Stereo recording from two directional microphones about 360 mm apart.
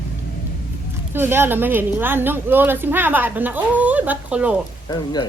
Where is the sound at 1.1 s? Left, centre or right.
Centre.